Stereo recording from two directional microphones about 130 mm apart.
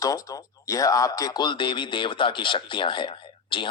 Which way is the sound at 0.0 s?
25° left (ahead or behind).